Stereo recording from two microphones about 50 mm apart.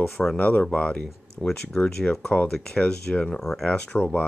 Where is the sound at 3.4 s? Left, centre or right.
Centre.